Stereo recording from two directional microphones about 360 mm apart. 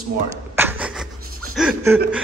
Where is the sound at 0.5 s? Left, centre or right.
Centre.